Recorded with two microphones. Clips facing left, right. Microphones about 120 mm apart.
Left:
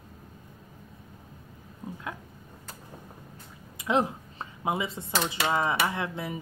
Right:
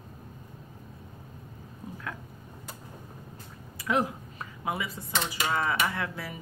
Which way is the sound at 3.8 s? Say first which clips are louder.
Left 2 dB; 25° left (ahead or behind).